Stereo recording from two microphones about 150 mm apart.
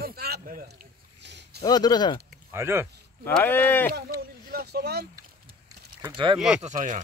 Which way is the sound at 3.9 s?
90° right.